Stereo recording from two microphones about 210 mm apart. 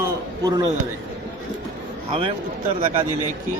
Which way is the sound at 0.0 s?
20° right (ahead or behind).